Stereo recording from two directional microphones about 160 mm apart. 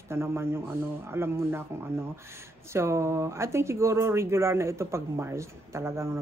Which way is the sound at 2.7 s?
15° right (ahead or behind).